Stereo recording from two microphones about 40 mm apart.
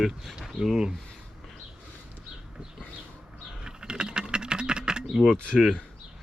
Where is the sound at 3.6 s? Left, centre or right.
Right.